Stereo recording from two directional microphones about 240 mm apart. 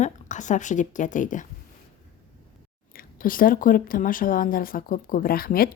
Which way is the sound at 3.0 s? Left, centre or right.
Left.